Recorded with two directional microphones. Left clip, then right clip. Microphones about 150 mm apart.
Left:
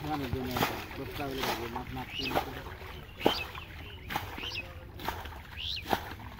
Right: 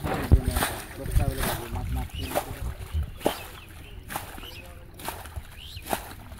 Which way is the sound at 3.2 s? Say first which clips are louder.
Even; 5° right (ahead or behind).